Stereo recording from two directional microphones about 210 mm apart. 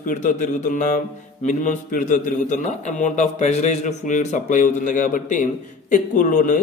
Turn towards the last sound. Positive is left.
turn(degrees=40)  # may be behind; listen again after turning